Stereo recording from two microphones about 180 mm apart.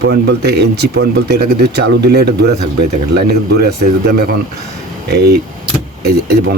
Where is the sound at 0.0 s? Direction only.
65° right (ahead or behind).